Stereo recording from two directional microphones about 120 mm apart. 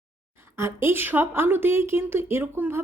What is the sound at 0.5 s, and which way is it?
A woman's voice, 20° right (ahead or behind).